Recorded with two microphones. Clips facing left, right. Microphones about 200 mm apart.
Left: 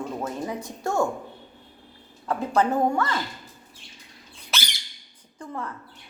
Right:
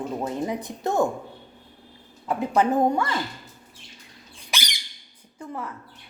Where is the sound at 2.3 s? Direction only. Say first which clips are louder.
Right 1 dB; 15° right (ahead or behind).